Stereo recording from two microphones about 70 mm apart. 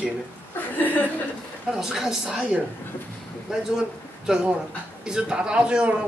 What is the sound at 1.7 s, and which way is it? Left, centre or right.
Speech, centre.